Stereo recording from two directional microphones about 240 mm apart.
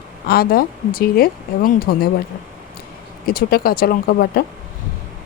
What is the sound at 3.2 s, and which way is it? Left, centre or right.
A woman's voice, left.